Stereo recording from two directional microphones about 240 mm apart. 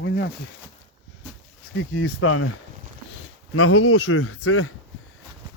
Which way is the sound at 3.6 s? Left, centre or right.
Left.